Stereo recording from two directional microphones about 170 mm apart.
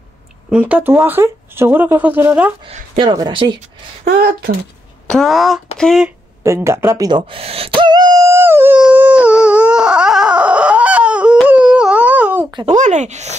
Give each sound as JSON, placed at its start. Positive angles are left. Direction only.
{"t": 0.5, "sound": "speech", "side_deg": -10}
{"t": 3.0, "sound": "a woman's voice", "side_deg": -25}
{"t": 4.0, "sound": "speech", "side_deg": -70}
{"t": 5.0, "sound": "speech", "side_deg": 5}
{"t": 6.0, "sound": "speech", "side_deg": -15}
{"t": 7.1, "sound": "speech", "side_deg": -30}
{"t": 8.3, "sound": "dog", "side_deg": -15}
{"t": 12.6, "sound": "speech", "side_deg": -45}